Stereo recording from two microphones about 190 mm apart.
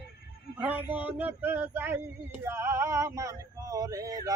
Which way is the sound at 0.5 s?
10° right (ahead or behind).